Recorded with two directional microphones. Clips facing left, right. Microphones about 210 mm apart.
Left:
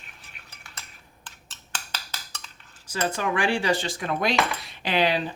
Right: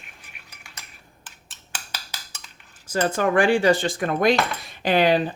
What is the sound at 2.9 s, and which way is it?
Speech, 50° right (ahead or behind).